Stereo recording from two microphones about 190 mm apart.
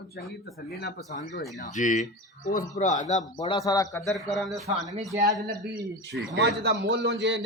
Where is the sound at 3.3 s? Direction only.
20° left (ahead or behind).